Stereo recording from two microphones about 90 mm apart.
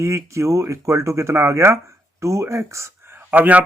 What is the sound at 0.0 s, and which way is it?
Speech, 35° right (ahead or behind).